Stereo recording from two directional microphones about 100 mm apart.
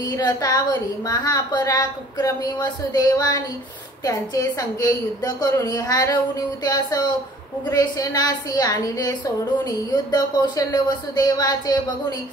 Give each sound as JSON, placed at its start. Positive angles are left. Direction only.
{"t": 0.0, "sound": "a woman's voice", "side_deg": 40}